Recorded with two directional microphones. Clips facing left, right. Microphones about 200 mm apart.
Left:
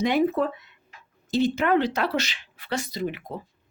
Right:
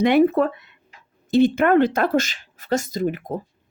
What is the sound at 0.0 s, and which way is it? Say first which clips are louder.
Speech: right 6 dB; 60° right (ahead or behind).